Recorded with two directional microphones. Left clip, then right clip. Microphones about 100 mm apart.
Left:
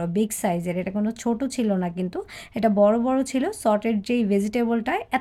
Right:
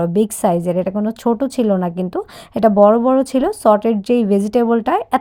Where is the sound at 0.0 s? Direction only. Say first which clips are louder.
Right 9 dB; 45° right (ahead or behind).